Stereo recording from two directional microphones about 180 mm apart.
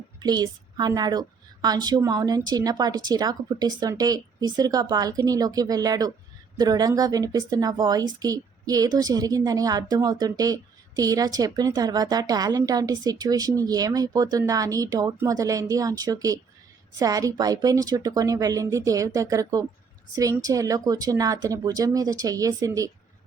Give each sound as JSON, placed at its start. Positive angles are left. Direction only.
{"t": 0.2, "sound": "a woman's voice", "side_deg": -20}